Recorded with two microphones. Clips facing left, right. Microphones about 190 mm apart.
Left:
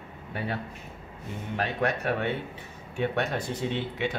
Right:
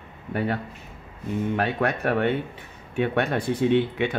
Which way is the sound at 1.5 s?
55° right (ahead or behind).